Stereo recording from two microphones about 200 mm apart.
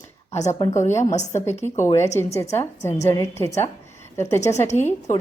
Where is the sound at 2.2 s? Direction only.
15° left (ahead or behind).